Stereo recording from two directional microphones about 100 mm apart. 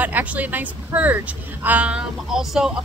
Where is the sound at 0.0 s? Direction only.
15° right (ahead or behind).